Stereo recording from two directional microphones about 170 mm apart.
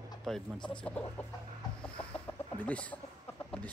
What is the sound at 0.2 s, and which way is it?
Speech, centre (ahead or behind).